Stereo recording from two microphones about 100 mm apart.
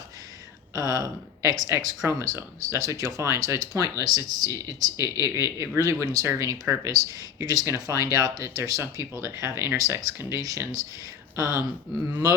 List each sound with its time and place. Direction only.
0.8 s speech: 40° right (ahead or behind)